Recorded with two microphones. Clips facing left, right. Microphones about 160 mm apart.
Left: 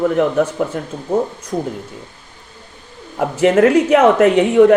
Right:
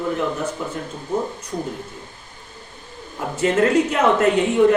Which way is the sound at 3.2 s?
60° left (ahead or behind).